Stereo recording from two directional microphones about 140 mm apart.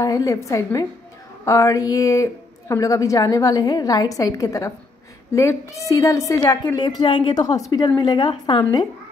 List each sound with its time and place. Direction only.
0.0 s a woman's voice: 25° left (ahead or behind)